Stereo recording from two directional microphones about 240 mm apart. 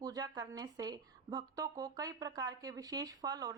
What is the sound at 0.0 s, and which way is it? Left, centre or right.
Speech, centre.